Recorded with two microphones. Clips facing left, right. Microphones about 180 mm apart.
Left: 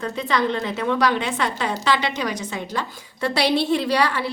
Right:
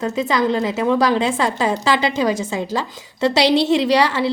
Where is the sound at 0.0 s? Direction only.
20° right (ahead or behind).